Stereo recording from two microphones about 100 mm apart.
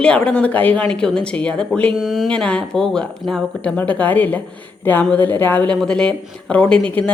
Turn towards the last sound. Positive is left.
turn(degrees=15)  # may be behind; listen again after turning